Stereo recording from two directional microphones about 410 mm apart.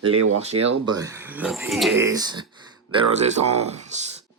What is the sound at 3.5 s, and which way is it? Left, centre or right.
Speech, centre.